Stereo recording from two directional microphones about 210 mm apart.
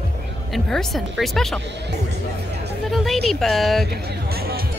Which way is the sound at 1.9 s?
50° right (ahead or behind).